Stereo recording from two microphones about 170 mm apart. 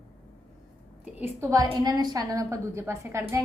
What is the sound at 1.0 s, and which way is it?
A woman's voice, 10° right (ahead or behind).